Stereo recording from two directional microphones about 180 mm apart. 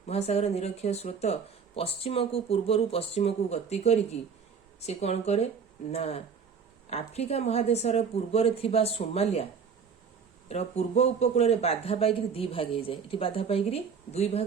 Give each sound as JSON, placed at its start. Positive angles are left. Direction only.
{"t": 0.1, "sound": "speech", "side_deg": 35}
{"t": 10.5, "sound": "speech", "side_deg": 35}